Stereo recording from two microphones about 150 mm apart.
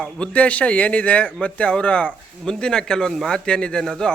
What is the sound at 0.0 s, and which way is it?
A man's voice, 10° left (ahead or behind).